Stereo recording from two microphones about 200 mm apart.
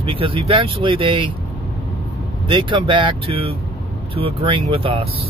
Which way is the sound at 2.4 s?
25° right (ahead or behind).